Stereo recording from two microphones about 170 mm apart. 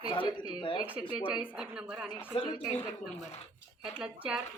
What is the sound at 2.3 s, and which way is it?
Speech, 30° left (ahead or behind).